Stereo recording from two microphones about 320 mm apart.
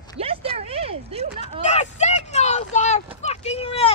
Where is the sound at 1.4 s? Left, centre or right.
Left.